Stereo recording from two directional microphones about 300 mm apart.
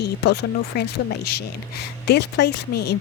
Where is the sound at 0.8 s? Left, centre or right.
Left.